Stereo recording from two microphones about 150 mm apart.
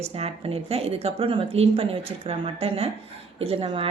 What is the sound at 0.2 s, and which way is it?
A woman's voice, 40° right (ahead or behind).